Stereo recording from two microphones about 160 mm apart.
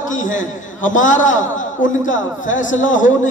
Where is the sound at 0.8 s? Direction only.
55° left (ahead or behind).